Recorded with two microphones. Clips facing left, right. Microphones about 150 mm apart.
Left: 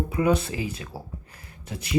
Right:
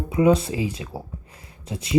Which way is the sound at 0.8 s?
25° right (ahead or behind).